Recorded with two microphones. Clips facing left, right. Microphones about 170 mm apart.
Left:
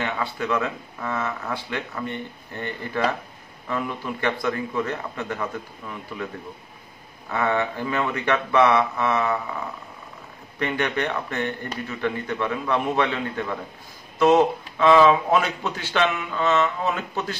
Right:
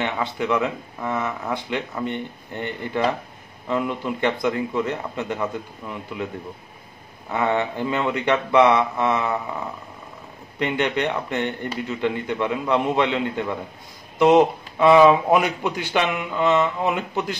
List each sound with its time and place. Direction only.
0.0 s speech: 20° right (ahead or behind)
7.2 s speech: 15° right (ahead or behind)
10.6 s speech: 20° right (ahead or behind)